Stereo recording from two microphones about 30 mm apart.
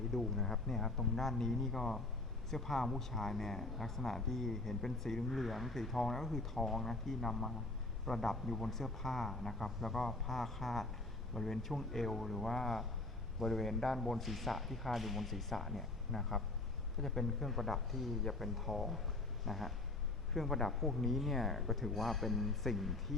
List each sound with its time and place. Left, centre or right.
0.1 s speech: centre